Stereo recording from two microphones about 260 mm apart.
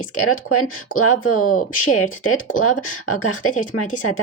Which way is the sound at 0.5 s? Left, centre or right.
Left.